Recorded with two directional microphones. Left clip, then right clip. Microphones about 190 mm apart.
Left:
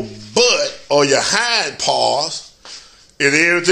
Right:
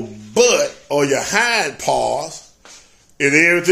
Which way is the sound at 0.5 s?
15° right (ahead or behind).